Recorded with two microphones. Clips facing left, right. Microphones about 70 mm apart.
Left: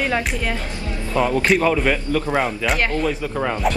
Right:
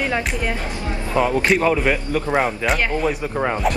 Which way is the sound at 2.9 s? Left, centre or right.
Centre.